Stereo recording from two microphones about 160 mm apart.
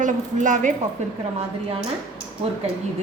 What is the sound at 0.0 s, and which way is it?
Speech, 50° right (ahead or behind).